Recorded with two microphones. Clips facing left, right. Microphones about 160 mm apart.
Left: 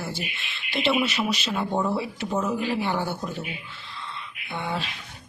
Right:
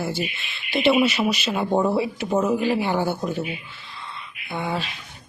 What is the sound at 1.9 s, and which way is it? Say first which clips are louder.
Speech: right 5 dB; 5° right (ahead or behind).